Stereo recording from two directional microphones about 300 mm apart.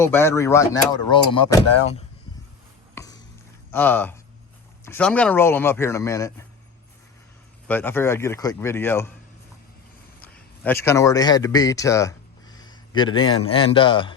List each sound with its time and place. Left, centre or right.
0.0 s speech: centre
2.9 s a sound: centre
3.7 s speech: centre
7.7 s speech: centre
10.2 s a sound: centre
13.4 s speech: centre